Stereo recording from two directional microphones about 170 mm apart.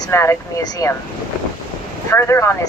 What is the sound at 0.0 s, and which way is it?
Speech, 15° left (ahead or behind).